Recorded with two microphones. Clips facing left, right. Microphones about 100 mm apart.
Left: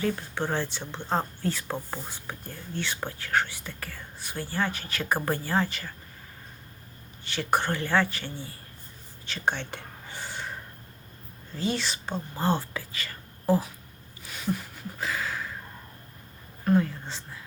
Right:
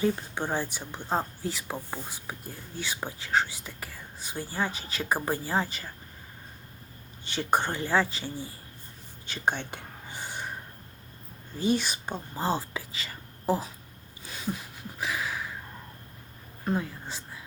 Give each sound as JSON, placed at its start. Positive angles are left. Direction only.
{"t": 0.0, "sound": "speech", "side_deg": -20}
{"t": 7.3, "sound": "speech", "side_deg": -20}
{"t": 9.2, "sound": "whispering", "side_deg": -15}
{"t": 11.5, "sound": "speech", "side_deg": -15}
{"t": 14.3, "sound": "a sound", "side_deg": -20}
{"t": 16.6, "sound": "speech", "side_deg": -10}